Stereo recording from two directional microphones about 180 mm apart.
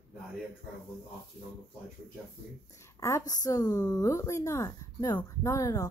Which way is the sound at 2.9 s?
15° left (ahead or behind).